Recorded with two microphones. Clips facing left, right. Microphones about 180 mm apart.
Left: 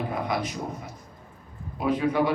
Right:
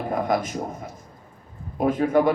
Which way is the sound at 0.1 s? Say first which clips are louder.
Right 5 dB; 45° right (ahead or behind).